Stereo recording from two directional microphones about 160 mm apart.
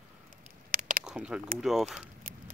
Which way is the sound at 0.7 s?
55° right (ahead or behind).